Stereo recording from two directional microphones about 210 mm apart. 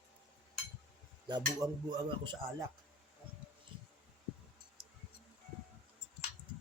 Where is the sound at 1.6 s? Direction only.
20° right (ahead or behind).